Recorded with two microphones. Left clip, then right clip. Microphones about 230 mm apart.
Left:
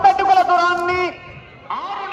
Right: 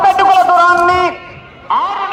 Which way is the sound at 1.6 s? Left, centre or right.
Right.